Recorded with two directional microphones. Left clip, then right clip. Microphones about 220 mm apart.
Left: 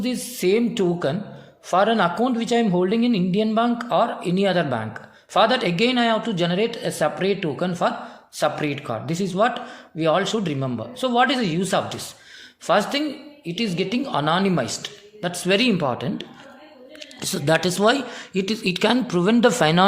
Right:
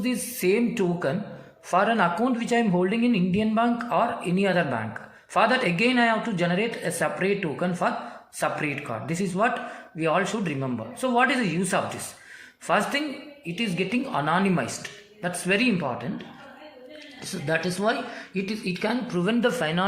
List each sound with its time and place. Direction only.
0.1 s a man's voice: 30° left (ahead or behind)
17.2 s a man's voice: 50° left (ahead or behind)